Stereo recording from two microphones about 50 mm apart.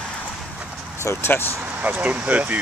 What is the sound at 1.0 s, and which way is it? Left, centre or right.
Speech, left.